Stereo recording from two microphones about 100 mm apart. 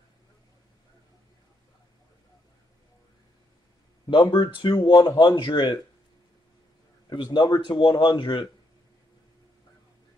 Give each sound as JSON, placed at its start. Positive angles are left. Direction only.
{"t": 4.1, "sound": "speech", "side_deg": 50}
{"t": 7.1, "sound": "speech", "side_deg": 50}